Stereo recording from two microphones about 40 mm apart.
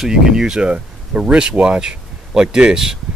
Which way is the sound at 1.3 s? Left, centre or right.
Centre.